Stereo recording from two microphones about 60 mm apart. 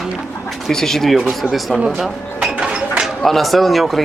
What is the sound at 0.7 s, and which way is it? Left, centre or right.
Speech, centre.